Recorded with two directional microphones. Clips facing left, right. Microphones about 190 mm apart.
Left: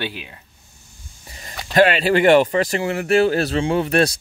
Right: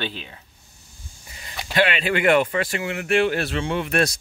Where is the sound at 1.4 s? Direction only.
40° left (ahead or behind).